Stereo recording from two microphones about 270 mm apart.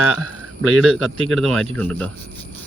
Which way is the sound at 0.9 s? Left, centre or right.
Right.